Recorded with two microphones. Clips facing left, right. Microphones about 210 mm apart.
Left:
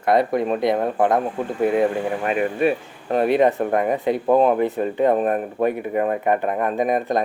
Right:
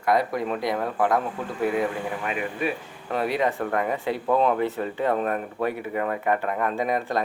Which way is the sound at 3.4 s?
20° left (ahead or behind).